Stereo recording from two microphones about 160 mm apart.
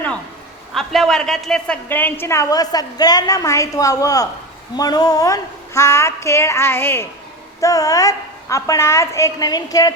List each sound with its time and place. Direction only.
0.7 s a woman's voice: centre (ahead or behind); by 9.9 s 25° left (ahead or behind)